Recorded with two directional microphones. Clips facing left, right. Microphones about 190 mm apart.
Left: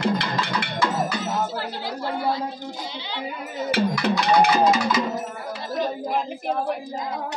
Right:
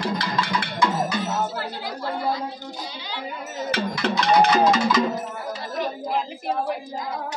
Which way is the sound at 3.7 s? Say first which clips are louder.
Left 3 dB; 10° left (ahead or behind).